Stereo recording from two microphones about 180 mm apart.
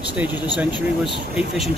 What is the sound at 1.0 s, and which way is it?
Speech, centre (ahead or behind).